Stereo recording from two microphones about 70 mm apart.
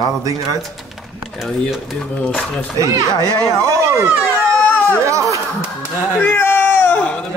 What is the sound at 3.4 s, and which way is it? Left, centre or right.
A man's voice, right.